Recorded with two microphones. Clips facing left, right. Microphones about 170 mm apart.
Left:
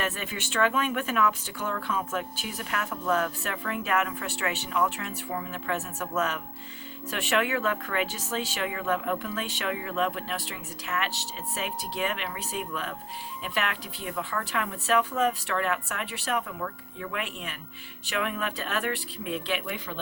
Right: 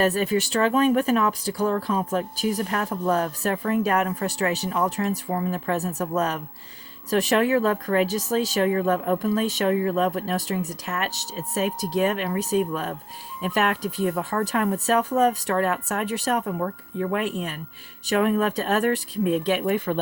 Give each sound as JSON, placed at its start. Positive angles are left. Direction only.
{"t": 0.0, "sound": "speech", "side_deg": -35}